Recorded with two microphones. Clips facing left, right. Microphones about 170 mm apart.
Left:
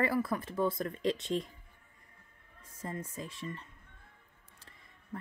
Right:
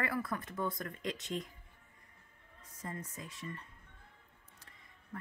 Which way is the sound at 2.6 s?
25° left (ahead or behind).